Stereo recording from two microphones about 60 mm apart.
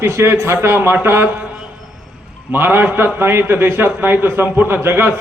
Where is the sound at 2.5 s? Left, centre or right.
Right.